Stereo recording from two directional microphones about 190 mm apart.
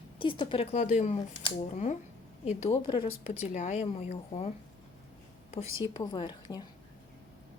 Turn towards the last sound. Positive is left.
turn(degrees=25)  # may be behind; listen again after turning